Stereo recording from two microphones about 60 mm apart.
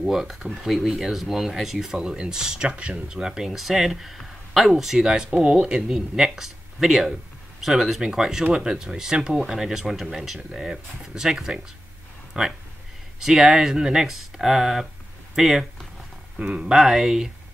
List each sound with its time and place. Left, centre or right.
0.0 s speech: centre